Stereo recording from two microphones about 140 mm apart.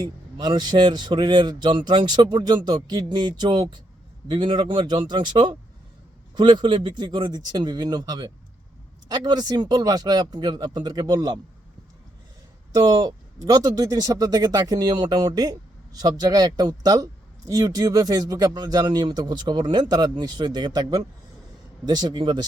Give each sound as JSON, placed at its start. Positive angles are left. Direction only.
{"t": 0.0, "sound": "a man's voice", "side_deg": -30}
{"t": 12.7, "sound": "speech", "side_deg": -25}